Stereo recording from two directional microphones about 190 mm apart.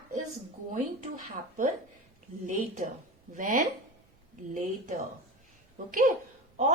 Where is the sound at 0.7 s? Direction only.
40° right (ahead or behind).